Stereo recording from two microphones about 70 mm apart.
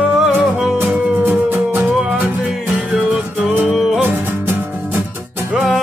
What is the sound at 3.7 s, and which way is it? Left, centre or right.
Music, centre.